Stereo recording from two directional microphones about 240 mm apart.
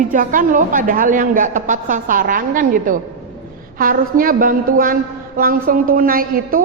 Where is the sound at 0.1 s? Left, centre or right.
Right.